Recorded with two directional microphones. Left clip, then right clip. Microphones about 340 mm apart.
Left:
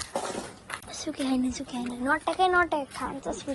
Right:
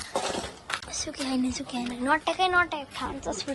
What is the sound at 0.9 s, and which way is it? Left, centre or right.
Speech, centre.